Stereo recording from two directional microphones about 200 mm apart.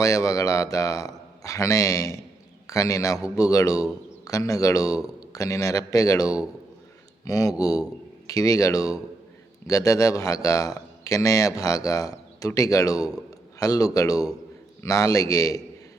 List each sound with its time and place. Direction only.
0.0 s a man's voice: 15° left (ahead or behind)